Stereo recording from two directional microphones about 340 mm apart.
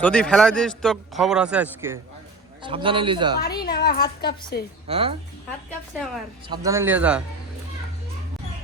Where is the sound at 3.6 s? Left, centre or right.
Left.